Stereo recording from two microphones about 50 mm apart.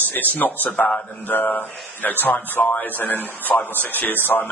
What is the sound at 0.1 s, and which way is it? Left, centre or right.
A man's voice, left.